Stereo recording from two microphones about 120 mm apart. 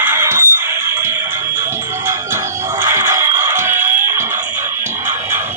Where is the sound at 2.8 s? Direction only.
20° right (ahead or behind).